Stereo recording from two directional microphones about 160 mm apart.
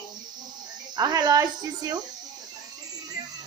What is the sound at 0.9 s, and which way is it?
Speech, 25° right (ahead or behind).